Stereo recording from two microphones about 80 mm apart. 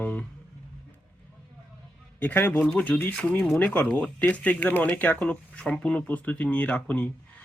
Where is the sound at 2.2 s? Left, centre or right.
Left.